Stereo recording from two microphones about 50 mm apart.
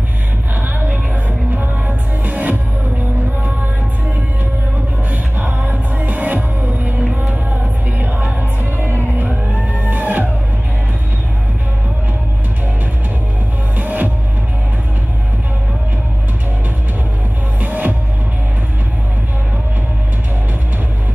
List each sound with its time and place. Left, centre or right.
1.5 s music: right
5.1 s music: right
8.7 s music: right
13.7 s music: right
17.6 s music: right